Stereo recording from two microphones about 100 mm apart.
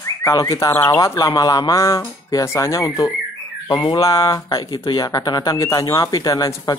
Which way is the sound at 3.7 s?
50° left (ahead or behind).